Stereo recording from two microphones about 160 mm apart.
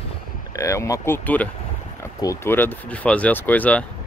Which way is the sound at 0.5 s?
20° left (ahead or behind).